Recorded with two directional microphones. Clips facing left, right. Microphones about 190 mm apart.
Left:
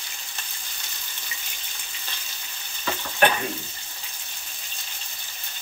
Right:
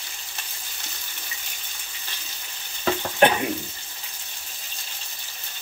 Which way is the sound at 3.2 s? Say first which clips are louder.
Right 3 dB; 25° right (ahead or behind).